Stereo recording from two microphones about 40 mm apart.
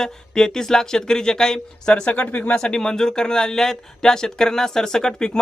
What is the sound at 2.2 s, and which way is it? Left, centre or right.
Speech, left.